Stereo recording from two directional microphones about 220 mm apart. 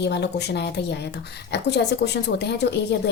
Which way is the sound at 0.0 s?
50° left (ahead or behind).